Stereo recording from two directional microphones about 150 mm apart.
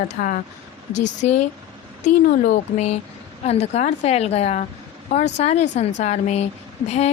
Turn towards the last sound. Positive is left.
turn(degrees=45)  # may be behind; listen again after turning